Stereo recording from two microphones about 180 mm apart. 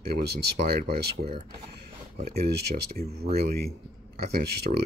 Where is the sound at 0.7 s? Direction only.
55° right (ahead or behind).